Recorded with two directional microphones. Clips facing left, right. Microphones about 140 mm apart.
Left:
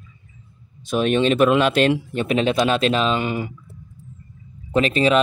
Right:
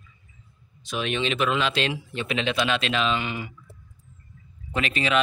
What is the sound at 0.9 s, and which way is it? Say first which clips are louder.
Speech: left 9 dB; 45° left (ahead or behind).